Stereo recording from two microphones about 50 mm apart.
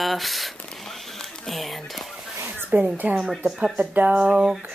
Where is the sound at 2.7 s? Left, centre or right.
Right.